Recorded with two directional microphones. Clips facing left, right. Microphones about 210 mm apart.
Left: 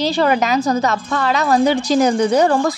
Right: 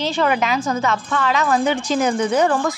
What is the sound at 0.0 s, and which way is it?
A woman's voice, 35° left (ahead or behind).